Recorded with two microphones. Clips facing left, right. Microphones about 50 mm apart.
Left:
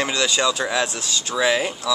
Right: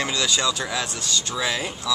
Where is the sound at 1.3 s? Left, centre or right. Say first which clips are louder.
Left 8 dB; centre.